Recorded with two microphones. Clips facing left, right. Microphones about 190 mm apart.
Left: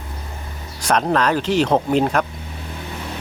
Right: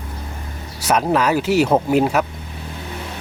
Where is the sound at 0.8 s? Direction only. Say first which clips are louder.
Right 1 dB; 5° right (ahead or behind).